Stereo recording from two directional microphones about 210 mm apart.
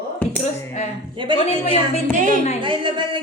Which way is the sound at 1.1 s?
25° right (ahead or behind).